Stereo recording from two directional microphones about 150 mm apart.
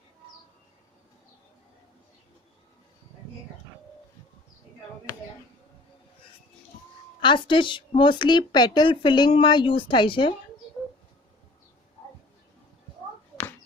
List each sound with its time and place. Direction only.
7.2 s a woman's voice: 30° left (ahead or behind)